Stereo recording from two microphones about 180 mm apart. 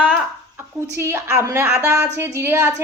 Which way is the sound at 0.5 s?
15° right (ahead or behind).